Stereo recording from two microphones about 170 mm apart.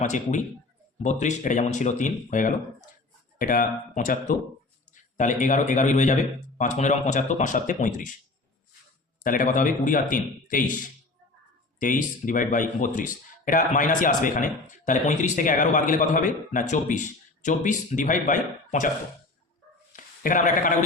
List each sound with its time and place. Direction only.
0.0 s speech: 45° left (ahead or behind)
9.2 s speech: 55° left (ahead or behind)
11.8 s speech: 50° left (ahead or behind)
19.9 s a sound: 50° left (ahead or behind)